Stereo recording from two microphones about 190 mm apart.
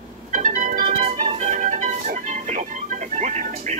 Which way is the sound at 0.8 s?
30° right (ahead or behind).